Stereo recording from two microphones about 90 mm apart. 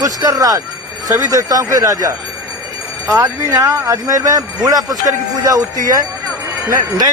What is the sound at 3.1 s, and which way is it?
Speech, 35° right (ahead or behind).